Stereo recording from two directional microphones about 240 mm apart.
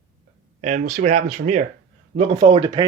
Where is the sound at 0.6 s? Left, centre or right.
Right.